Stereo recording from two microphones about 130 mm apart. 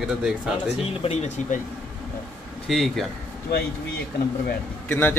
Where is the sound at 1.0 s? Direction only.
55° left (ahead or behind).